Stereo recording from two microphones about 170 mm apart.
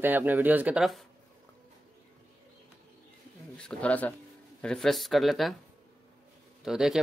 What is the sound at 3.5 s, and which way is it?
Speech, 5° left (ahead or behind).